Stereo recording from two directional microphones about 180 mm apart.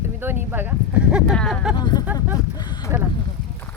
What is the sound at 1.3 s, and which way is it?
Speech, 5° left (ahead or behind).